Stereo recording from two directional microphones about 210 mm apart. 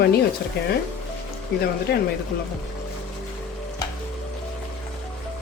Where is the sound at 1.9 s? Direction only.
50° left (ahead or behind).